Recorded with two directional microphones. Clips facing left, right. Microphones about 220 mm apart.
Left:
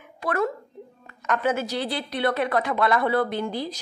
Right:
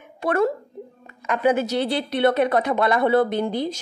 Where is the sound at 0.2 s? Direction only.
25° right (ahead or behind).